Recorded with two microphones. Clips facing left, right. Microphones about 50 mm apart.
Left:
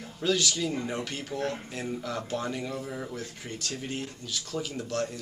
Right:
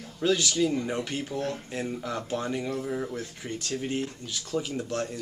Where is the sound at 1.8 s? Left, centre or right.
Centre.